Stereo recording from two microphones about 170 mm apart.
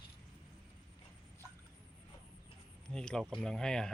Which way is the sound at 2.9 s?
5° left (ahead or behind).